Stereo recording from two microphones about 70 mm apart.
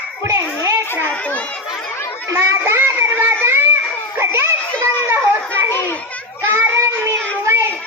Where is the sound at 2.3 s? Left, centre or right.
Right.